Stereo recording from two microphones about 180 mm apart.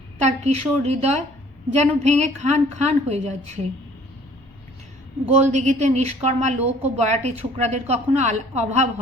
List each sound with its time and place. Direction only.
0.2 s a woman's voice: 40° right (ahead or behind)
5.3 s a woman's voice: 40° right (ahead or behind)